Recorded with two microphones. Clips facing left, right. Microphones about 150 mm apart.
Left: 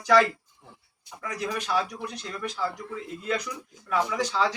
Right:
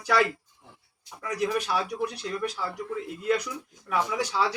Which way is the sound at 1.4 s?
10° right (ahead or behind).